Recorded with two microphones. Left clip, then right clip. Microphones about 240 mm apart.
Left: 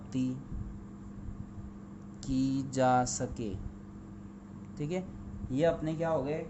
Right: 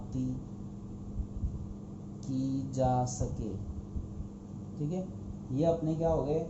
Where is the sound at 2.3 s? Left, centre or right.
Left.